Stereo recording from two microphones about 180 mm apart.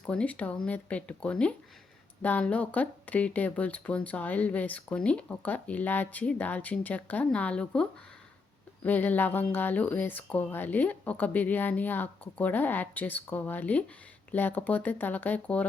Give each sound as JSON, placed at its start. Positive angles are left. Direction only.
{"t": 0.0, "sound": "speech", "side_deg": 5}